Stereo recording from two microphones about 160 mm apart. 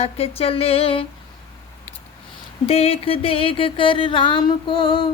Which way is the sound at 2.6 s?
40° left (ahead or behind).